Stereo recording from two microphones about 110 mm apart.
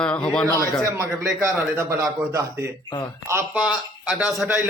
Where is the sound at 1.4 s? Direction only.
25° right (ahead or behind).